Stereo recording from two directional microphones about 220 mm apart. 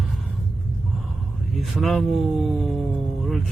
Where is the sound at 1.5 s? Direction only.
Centre (ahead or behind).